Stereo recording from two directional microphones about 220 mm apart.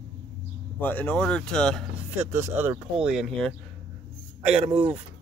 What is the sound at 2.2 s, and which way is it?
Speech, 10° right (ahead or behind).